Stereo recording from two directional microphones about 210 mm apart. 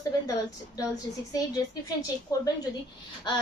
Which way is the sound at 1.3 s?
15° left (ahead or behind).